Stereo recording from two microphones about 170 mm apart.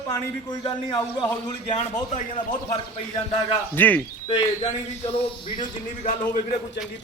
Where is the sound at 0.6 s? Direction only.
25° left (ahead or behind).